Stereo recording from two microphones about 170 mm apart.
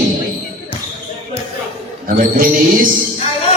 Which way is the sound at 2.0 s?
55° right (ahead or behind).